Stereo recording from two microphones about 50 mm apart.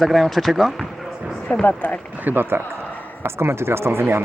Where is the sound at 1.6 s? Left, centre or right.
Left.